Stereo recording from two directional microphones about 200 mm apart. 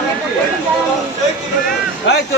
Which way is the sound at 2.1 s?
65° left (ahead or behind).